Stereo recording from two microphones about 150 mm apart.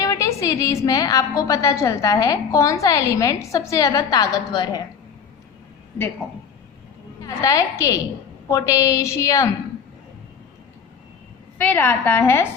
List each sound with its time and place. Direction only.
0.0 s a woman's voice: 20° left (ahead or behind)
7.2 s a woman's voice: 20° left (ahead or behind)
11.5 s a woman's voice: 10° left (ahead or behind)